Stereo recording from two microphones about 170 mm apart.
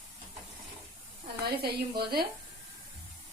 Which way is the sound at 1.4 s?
65° right (ahead or behind).